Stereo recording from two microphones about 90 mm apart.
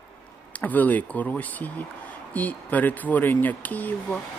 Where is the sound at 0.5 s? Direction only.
20° left (ahead or behind).